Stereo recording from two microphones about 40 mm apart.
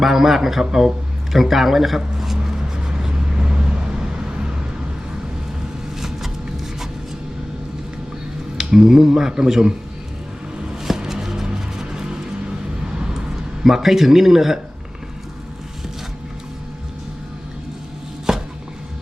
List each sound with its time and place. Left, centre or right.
0.0 s speech: centre
1.3 s a man's voice: centre
3.0 s vehicle: centre
6.0 s vehicle: centre
8.5 s speech: centre
11.1 s music: centre
13.0 s a sound: centre
18.3 s chopping: centre